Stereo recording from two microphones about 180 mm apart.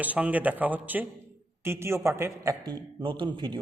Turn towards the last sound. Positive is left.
turn(degrees=-25)  # may be behind; listen again after turning